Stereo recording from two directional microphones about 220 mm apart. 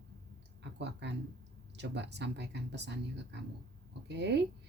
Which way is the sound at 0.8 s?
50° right (ahead or behind).